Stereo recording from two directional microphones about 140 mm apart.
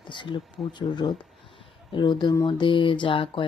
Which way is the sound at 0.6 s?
5° left (ahead or behind).